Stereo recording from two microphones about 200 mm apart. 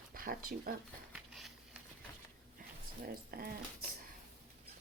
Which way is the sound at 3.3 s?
50° right (ahead or behind).